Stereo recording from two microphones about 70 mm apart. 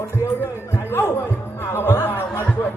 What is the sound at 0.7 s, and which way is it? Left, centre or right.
Chatter, left.